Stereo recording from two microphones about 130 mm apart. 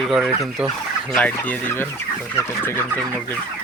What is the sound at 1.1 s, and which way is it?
Speech, 10° left (ahead or behind).